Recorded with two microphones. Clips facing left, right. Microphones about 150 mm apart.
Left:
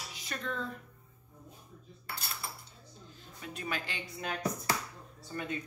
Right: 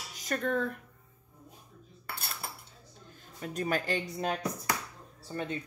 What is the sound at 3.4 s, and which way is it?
Speech, 45° right (ahead or behind).